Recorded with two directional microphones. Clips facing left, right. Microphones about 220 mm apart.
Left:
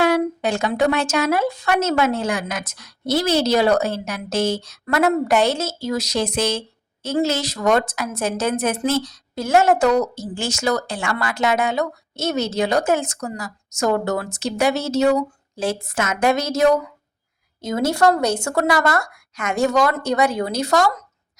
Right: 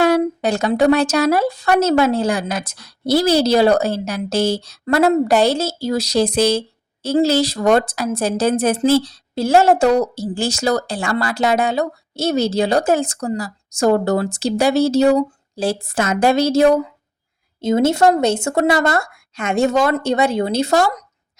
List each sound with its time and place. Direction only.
0.0 s speech: 35° right (ahead or behind)